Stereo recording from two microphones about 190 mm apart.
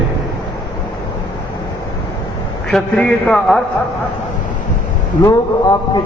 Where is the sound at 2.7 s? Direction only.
5° left (ahead or behind).